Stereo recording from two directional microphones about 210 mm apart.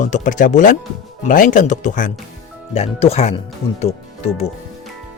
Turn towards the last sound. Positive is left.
turn(degrees=30)  # may be behind; listen again after turning